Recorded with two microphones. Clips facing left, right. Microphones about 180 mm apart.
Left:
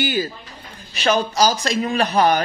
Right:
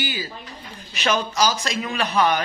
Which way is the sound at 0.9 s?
35° left (ahead or behind).